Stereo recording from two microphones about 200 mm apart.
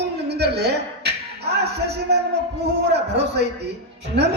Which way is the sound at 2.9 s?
55° right (ahead or behind).